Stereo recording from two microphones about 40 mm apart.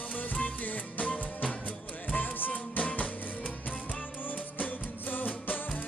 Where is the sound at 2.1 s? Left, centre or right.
Left.